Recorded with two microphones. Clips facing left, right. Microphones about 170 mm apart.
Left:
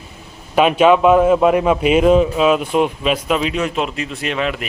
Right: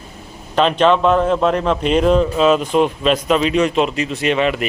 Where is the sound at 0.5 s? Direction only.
10° left (ahead or behind).